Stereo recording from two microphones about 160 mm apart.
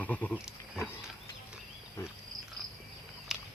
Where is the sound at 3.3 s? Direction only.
5° right (ahead or behind).